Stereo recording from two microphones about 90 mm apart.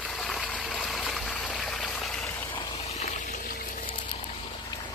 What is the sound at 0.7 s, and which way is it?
Stream, centre (ahead or behind).